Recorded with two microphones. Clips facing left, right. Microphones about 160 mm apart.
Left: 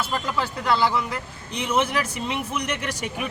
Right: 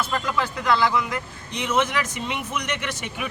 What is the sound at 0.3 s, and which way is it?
A man's voice, 30° left (ahead or behind).